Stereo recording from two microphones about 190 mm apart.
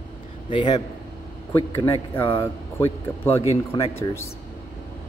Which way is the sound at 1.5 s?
10° left (ahead or behind).